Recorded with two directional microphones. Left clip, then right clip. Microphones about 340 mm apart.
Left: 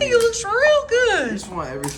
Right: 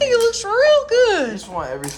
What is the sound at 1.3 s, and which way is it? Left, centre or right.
Speech, right.